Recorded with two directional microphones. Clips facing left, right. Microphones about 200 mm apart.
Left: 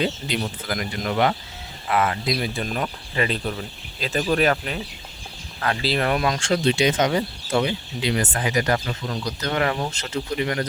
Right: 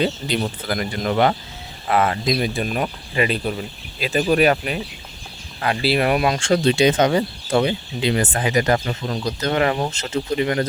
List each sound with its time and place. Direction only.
0.0 s speech: 35° right (ahead or behind)
2.6 s speech: 15° right (ahead or behind)
6.5 s speech: 35° right (ahead or behind)